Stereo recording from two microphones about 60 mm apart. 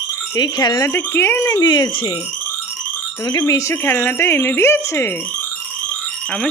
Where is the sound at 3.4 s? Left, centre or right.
Left.